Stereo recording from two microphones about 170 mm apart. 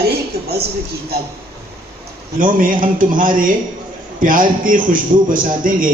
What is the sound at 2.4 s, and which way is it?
A man's voice, 55° right (ahead or behind).